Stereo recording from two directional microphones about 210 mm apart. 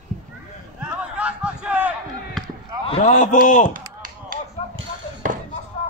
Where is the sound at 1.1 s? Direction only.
5° right (ahead or behind).